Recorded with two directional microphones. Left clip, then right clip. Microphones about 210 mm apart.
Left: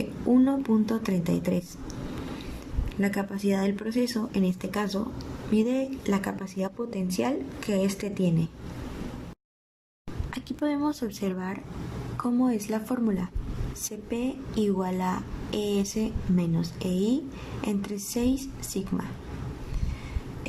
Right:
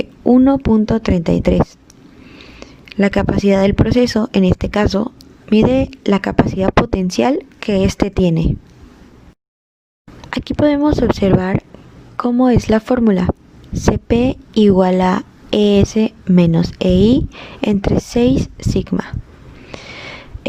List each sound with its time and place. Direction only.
0.3 s a woman's voice: 40° right (ahead or behind)
2.6 s speech: 45° right (ahead or behind)
10.2 s a woman's voice: 40° right (ahead or behind)